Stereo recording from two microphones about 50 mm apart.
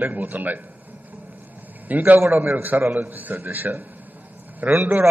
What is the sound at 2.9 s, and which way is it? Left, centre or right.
A man's voice, right.